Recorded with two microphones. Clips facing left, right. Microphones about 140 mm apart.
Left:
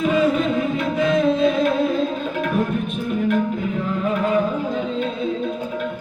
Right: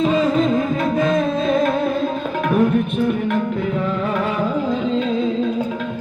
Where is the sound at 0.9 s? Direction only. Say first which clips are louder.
Left 2 dB; 45° right (ahead or behind).